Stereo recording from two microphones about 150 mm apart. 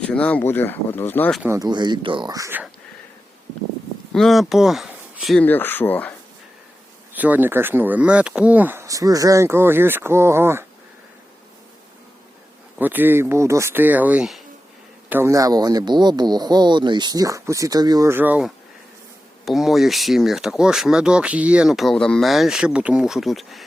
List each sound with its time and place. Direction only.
0.0 s speech: 10° left (ahead or behind)
1.4 s speech: 20° right (ahead or behind)
4.1 s speech: centre (ahead or behind)
5.4 s speech: 10° left (ahead or behind)
7.1 s speech: 10° right (ahead or behind)
12.8 s speech: 10° right (ahead or behind)
15.1 s speech: 20° right (ahead or behind); by 23.6 s centre (ahead or behind)